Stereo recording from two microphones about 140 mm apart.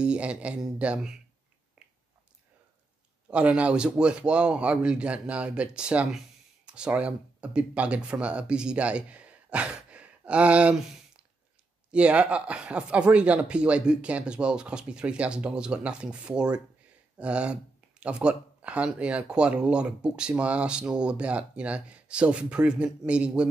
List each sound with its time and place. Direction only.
0.0 s speech: 10° right (ahead or behind)
3.3 s speech: 10° right (ahead or behind)